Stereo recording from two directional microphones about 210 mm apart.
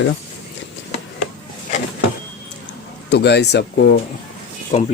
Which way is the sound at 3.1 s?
55° left (ahead or behind).